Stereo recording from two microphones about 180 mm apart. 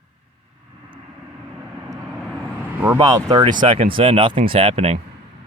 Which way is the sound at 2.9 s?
20° right (ahead or behind).